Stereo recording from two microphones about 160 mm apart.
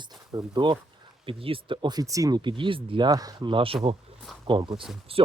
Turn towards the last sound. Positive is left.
turn(degrees=-35)  # may be behind; listen again after turning